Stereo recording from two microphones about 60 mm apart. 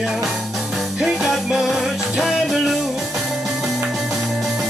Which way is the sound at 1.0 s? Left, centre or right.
Centre.